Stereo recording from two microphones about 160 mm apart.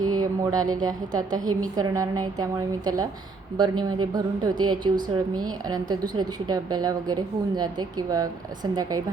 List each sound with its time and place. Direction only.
0.2 s a woman's voice: 25° right (ahead or behind)